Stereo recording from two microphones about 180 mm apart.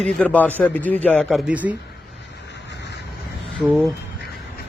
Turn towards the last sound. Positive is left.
turn(degrees=0)  # may be behind; listen again after turning